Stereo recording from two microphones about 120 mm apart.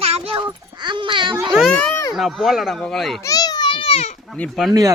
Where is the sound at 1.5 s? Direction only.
Centre (ahead or behind).